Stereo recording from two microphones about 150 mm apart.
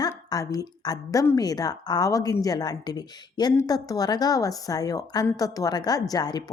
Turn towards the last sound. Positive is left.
turn(degrees=25)  # may be behind; listen again after turning